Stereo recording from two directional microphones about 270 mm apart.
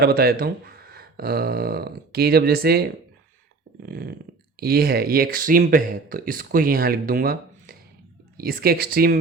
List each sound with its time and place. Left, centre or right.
0.0 s speech: right